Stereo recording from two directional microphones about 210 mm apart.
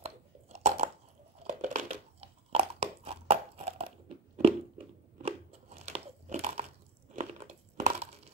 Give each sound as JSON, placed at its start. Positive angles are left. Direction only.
{"t": 0.0, "sound": "chewing", "side_deg": -30}
{"t": 1.4, "sound": "crumpling", "side_deg": -30}
{"t": 4.4, "sound": "crunch", "side_deg": -30}
{"t": 7.2, "sound": "a sound", "side_deg": -35}